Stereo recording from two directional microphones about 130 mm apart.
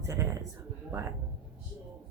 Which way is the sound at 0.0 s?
20° right (ahead or behind).